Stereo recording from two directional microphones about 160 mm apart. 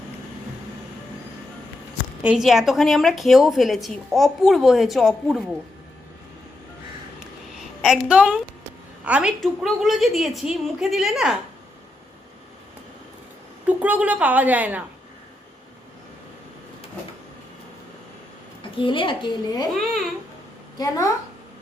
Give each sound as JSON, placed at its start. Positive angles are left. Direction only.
{"t": 2.2, "sound": "a woman's voice", "side_deg": -5}
{"t": 7.8, "sound": "a woman's voice", "side_deg": -5}
{"t": 13.7, "sound": "a woman's voice", "side_deg": -10}
{"t": 18.6, "sound": "a woman's voice", "side_deg": 30}
{"t": 19.8, "sound": "a woman's voice", "side_deg": 0}
{"t": 20.7, "sound": "a woman's voice", "side_deg": 20}